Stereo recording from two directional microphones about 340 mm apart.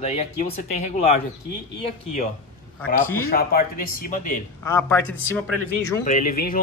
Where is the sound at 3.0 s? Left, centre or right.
Centre.